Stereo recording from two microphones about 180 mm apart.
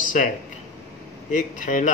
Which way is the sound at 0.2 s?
45° left (ahead or behind).